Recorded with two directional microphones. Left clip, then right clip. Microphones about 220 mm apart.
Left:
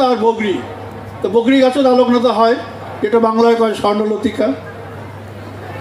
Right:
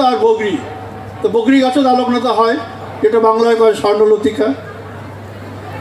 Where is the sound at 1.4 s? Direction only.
30° left (ahead or behind).